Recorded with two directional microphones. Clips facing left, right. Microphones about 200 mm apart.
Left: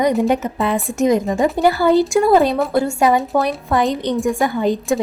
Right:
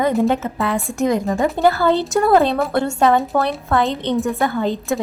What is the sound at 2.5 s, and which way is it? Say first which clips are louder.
Speech: left 1 dB; centre (ahead or behind).